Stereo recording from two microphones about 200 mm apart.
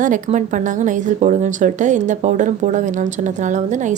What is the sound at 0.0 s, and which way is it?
Speech, 40° right (ahead or behind).